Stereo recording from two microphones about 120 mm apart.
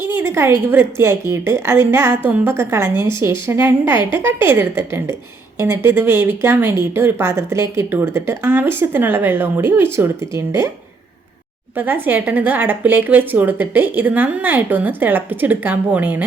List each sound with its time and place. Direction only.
0.0 s speech: 20° right (ahead or behind)
11.8 s a woman's voice: 15° right (ahead or behind)